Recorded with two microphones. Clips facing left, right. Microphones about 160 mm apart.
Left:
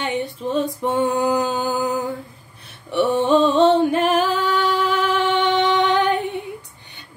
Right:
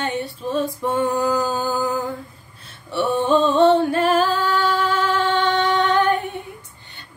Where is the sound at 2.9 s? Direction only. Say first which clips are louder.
Left 2 dB; 20° left (ahead or behind).